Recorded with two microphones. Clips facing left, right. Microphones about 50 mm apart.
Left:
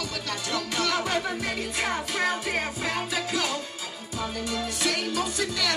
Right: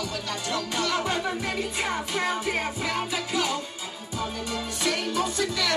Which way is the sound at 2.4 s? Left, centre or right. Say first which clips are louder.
Right 1 dB; centre.